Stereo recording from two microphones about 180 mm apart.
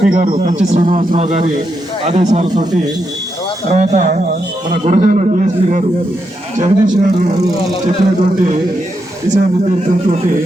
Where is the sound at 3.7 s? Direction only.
40° right (ahead or behind).